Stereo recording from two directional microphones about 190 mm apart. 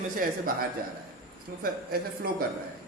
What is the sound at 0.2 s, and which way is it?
Speech, 50° right (ahead or behind).